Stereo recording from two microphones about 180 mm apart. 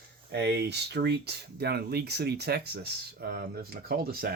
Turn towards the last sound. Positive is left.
turn(degrees=-55)  # may be behind; listen again after turning